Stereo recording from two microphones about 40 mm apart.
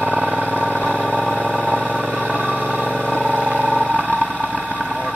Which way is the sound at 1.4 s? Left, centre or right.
Right.